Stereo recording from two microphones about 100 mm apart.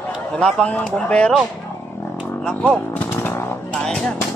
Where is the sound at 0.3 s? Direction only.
5° left (ahead or behind).